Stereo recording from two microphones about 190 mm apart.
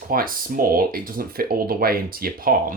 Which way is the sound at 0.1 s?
50° right (ahead or behind).